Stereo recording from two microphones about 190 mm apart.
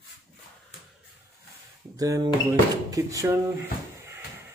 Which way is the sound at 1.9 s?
20° right (ahead or behind).